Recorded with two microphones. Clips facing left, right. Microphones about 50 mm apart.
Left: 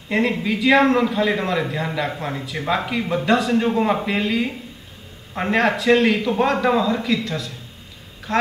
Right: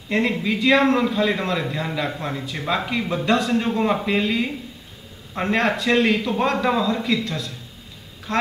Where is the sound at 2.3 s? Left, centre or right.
Centre.